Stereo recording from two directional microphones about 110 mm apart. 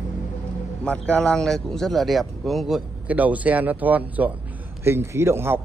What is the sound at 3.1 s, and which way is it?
A man's voice, 15° right (ahead or behind).